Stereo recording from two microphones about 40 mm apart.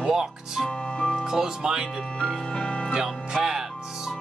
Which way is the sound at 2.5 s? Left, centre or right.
Left.